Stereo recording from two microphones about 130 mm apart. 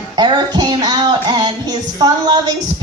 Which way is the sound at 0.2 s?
35° right (ahead or behind).